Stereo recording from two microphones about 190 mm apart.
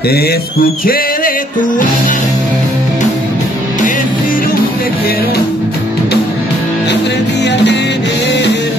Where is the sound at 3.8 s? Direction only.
45° left (ahead or behind).